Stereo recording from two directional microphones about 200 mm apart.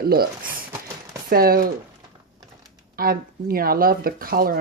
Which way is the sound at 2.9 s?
45° right (ahead or behind).